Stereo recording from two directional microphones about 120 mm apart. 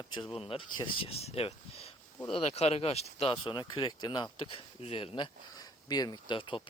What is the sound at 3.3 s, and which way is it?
Speech, 45° left (ahead or behind).